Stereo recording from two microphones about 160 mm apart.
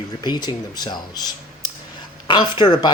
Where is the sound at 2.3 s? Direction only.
30° left (ahead or behind).